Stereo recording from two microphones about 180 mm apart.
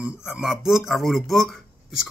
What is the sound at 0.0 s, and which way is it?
Speech, 5° right (ahead or behind).